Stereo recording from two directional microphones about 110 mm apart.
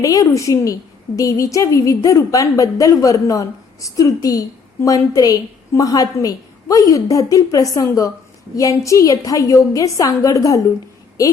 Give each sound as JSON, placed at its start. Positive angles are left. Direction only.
{"t": 0.0, "sound": "a woman's voice", "side_deg": 30}